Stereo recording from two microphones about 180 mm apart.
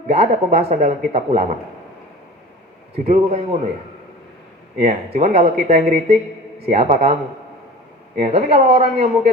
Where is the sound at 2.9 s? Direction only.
35° right (ahead or behind).